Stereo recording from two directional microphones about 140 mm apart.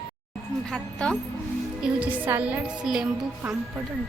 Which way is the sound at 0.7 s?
5° left (ahead or behind).